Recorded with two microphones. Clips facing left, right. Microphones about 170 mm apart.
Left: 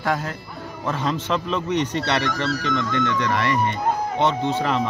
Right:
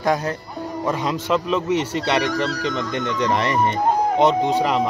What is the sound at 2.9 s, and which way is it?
A man's voice, 20° right (ahead or behind).